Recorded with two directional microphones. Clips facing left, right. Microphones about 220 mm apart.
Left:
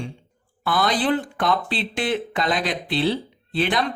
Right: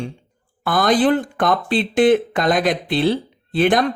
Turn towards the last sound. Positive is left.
turn(degrees=-50)  # may be behind; listen again after turning